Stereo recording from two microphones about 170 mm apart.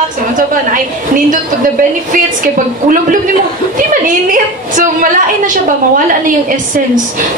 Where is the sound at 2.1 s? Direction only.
55° right (ahead or behind).